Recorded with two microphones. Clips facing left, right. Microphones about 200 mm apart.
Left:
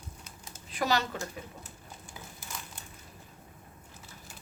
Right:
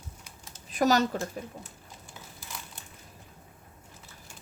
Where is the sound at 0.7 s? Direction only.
40° right (ahead or behind).